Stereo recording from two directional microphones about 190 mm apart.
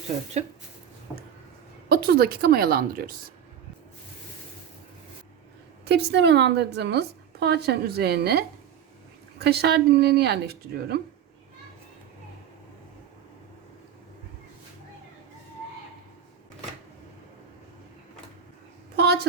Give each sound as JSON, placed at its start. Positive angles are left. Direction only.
{"t": 1.9, "sound": "a woman's voice", "side_deg": -55}
{"t": 5.8, "sound": "a woman's voice", "side_deg": -60}
{"t": 18.9, "sound": "a sound", "side_deg": -60}